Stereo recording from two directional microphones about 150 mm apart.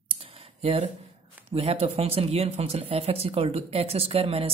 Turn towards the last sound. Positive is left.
turn(degrees=-40)  # may be behind; listen again after turning